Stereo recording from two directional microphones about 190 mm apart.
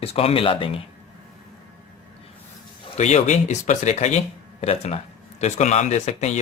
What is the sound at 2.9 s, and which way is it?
Speech, 35° left (ahead or behind).